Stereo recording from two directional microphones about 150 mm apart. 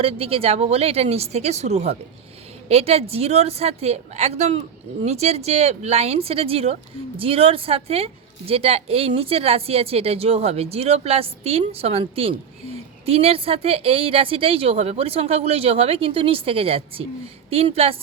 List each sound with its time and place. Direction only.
0.0 s a woman's voice: 40° right (ahead or behind)